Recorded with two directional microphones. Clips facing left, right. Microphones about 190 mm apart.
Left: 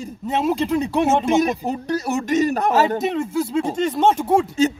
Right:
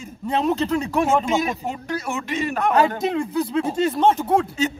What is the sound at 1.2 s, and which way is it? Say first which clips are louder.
Speech: left 4 dB; 40° left (ahead or behind).